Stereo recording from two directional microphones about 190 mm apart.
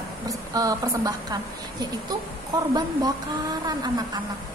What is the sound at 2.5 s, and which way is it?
Speech, 20° right (ahead or behind).